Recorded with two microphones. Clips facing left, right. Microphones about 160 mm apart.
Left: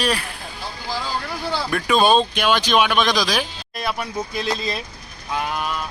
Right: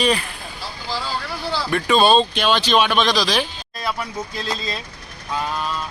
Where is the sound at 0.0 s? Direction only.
Centre (ahead or behind).